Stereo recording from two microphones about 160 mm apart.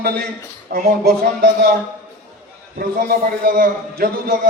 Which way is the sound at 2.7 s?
70° right (ahead or behind).